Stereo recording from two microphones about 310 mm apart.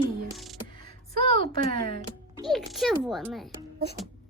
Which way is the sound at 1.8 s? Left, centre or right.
Right.